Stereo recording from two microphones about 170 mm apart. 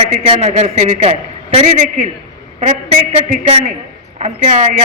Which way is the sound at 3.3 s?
40° right (ahead or behind).